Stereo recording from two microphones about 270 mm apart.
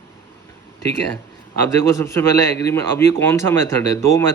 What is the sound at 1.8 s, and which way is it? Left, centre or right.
A man's voice, centre.